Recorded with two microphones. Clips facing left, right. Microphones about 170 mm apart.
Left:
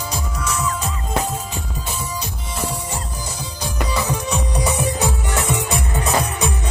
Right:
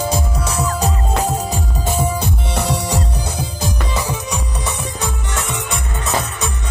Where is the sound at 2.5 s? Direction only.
75° right (ahead or behind).